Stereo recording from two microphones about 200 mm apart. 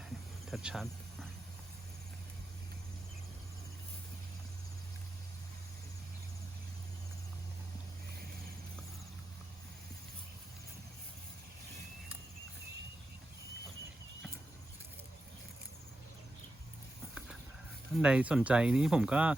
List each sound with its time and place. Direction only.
0.4 s cricket: centre (ahead or behind)
17.9 s speech: 5° right (ahead or behind)